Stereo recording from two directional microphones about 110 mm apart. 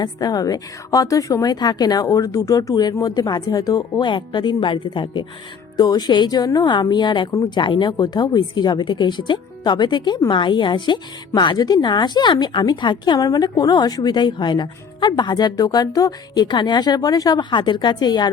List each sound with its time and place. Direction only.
0.0 s a woman's voice: 35° left (ahead or behind)
5.7 s a woman's voice: 40° left (ahead or behind)